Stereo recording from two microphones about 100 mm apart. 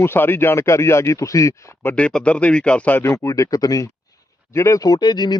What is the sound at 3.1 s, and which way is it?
Speech, 30° left (ahead or behind).